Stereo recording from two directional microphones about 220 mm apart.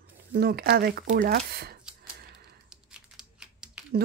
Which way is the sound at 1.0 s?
35° right (ahead or behind).